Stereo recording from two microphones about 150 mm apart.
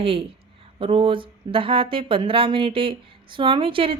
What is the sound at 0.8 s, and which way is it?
Speech, 35° right (ahead or behind).